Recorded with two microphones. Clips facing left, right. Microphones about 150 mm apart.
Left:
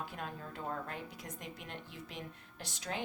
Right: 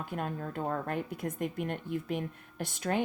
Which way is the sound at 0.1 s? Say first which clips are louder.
Right 8 dB; 55° right (ahead or behind).